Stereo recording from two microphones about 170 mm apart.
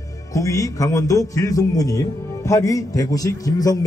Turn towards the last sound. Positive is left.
turn(degrees=20)  # may be behind; listen again after turning